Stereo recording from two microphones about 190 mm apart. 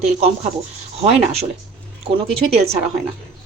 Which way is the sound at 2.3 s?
30° right (ahead or behind).